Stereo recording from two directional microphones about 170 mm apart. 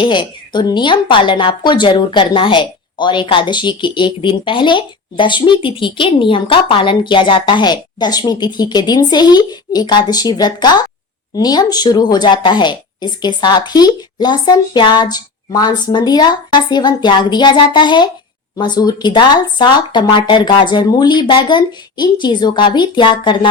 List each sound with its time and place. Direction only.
0.0 s a woman's voice: 25° left (ahead or behind)